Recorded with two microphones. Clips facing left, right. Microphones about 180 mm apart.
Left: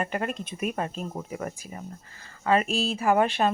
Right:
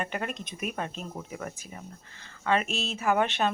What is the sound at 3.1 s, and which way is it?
Speech, centre (ahead or behind).